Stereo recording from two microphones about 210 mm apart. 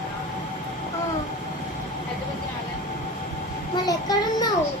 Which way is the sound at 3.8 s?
20° left (ahead or behind).